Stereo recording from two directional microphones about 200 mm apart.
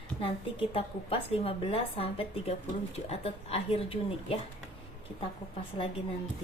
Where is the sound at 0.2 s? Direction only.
25° left (ahead or behind).